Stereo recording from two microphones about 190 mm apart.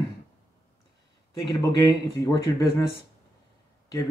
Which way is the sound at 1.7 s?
15° left (ahead or behind).